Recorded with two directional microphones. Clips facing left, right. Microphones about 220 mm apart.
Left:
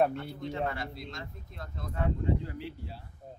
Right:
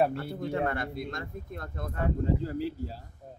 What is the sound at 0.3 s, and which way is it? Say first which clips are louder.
Speech: right 4 dB; 55° right (ahead or behind).